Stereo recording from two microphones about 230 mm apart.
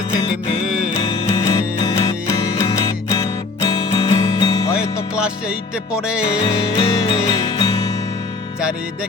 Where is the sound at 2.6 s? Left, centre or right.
Centre.